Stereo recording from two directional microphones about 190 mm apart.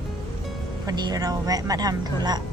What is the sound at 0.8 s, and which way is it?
A woman's voice, 20° right (ahead or behind).